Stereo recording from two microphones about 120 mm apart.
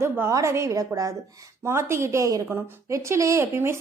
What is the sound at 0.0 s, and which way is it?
A woman's voice, 25° right (ahead or behind).